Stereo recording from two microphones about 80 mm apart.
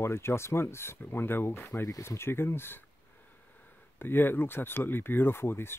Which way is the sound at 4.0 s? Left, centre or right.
Left.